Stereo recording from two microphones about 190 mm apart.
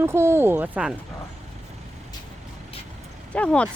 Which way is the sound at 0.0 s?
15° right (ahead or behind).